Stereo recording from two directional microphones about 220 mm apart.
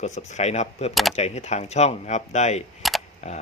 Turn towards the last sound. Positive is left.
turn(degrees=30)  # may be behind; listen again after turning